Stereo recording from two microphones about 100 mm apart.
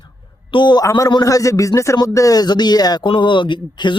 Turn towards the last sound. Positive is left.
turn(degrees=50)  # may be behind; listen again after turning